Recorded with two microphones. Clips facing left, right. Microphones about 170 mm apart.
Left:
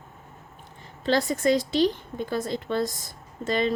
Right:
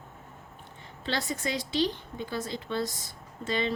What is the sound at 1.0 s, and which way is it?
Speech, 45° left (ahead or behind).